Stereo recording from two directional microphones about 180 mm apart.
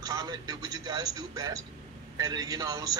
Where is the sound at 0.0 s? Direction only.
20° right (ahead or behind).